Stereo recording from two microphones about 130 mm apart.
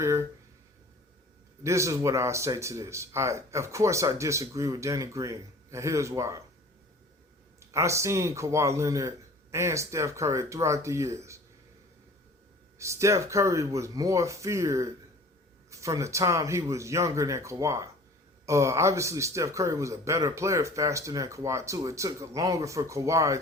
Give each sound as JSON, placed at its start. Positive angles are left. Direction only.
{"t": 0.0, "sound": "a sound", "side_deg": -20}
{"t": 1.6, "sound": "a man's voice", "side_deg": -20}
{"t": 7.6, "sound": "a man's voice", "side_deg": -20}
{"t": 12.8, "sound": "a man's voice", "side_deg": -20}